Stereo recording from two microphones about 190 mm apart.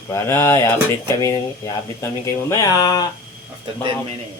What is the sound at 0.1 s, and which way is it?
Speech, 15° left (ahead or behind).